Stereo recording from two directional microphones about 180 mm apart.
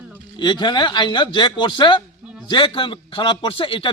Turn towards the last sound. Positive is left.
turn(degrees=30)  # may be behind; listen again after turning